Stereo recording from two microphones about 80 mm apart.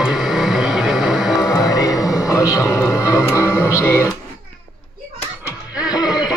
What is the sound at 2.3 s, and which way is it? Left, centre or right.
Music, left.